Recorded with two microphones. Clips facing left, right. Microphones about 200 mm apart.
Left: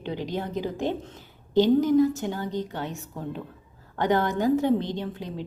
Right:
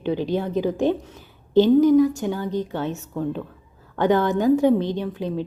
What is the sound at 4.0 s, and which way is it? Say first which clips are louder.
A woman's voice: right 4 dB; 15° left (ahead or behind).